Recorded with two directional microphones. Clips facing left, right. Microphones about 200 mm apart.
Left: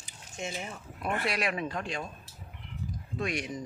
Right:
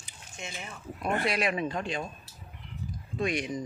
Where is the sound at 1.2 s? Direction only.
Centre (ahead or behind).